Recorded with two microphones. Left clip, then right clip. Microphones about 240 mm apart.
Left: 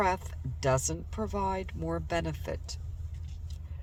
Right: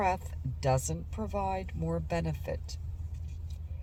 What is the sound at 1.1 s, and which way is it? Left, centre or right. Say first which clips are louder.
Speech: left 1 dB; left.